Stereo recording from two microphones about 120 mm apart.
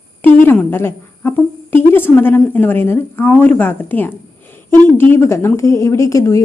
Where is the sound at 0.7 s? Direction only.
20° left (ahead or behind).